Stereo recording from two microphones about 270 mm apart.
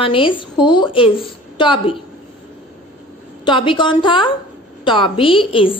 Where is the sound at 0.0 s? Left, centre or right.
Centre.